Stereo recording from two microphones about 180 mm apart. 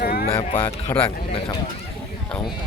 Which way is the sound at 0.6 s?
10° left (ahead or behind).